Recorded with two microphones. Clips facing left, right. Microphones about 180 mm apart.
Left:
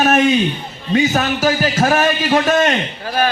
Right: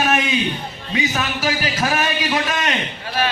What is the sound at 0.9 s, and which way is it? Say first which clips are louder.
A man's voice: left 7 dB; 45° left (ahead or behind).